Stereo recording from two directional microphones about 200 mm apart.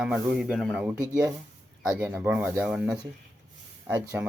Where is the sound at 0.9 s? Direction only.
15° right (ahead or behind).